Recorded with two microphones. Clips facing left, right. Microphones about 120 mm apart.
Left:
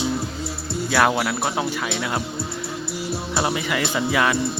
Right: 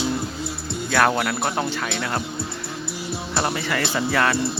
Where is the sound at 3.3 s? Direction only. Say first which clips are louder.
Even; 5° left (ahead or behind).